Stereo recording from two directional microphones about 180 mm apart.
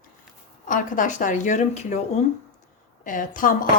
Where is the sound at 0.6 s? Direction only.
45° left (ahead or behind).